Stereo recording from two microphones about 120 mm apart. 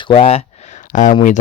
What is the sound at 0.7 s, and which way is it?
Speech, 90° left.